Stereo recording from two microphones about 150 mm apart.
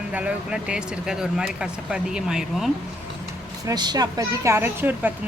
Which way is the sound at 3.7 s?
25° right (ahead or behind).